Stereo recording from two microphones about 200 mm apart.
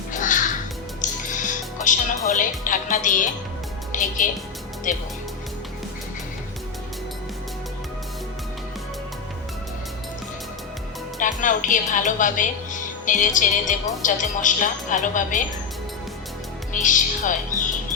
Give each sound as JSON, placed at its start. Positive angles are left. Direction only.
{"t": 0.1, "sound": "music", "side_deg": 40}
{"t": 2.6, "sound": "a woman's voice", "side_deg": 40}
{"t": 3.9, "sound": "music", "side_deg": 40}
{"t": 4.9, "sound": "a woman's voice", "side_deg": 40}
{"t": 11.2, "sound": "a woman's voice", "side_deg": 40}
{"t": 16.7, "sound": "speech", "side_deg": 40}